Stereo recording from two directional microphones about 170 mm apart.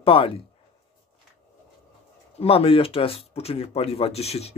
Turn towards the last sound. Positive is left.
turn(degrees=40)  # may be behind; listen again after turning